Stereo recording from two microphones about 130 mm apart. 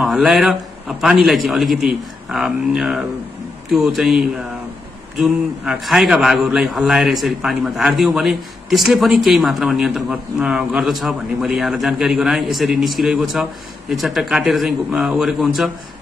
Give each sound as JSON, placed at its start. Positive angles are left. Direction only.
{"t": 0.0, "sound": "a man's voice", "side_deg": -5}